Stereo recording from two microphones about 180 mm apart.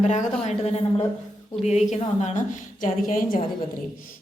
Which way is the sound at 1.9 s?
40° left (ahead or behind).